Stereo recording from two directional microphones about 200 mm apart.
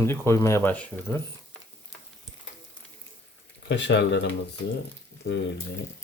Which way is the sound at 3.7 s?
60° left (ahead or behind).